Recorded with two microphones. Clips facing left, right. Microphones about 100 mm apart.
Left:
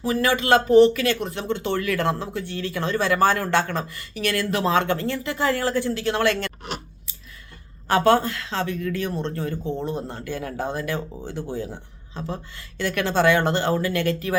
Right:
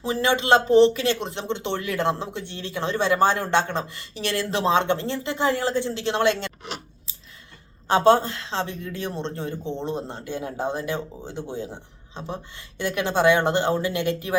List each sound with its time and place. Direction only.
0.0 s speech: 25° right (ahead or behind)
7.9 s speech: 25° right (ahead or behind)